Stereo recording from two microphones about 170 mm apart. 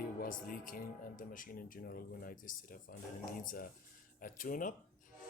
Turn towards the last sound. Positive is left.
turn(degrees=50)  # may be behind; listen again after turning